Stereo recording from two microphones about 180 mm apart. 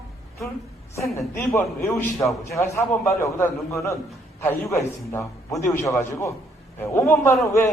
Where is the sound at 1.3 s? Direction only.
15° left (ahead or behind).